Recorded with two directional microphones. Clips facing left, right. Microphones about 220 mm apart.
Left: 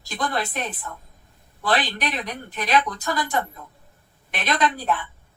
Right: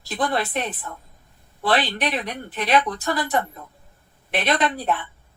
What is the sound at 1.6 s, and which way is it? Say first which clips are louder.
Speech: right 2 dB; 30° right (ahead or behind).